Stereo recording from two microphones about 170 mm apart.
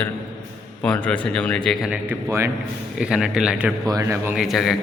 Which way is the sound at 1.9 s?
15° right (ahead or behind).